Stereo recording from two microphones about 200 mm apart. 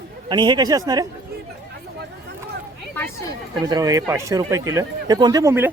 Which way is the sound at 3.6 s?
15° right (ahead or behind).